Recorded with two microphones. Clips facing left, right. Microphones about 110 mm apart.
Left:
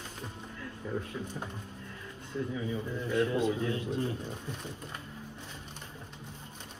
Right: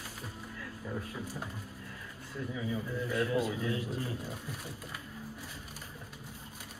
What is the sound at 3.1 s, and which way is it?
Speech, 25° left (ahead or behind).